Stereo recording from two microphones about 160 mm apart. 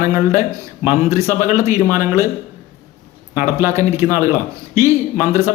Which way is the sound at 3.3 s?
15° right (ahead or behind).